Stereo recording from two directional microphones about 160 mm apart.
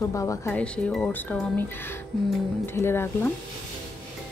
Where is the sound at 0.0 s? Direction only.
20° left (ahead or behind).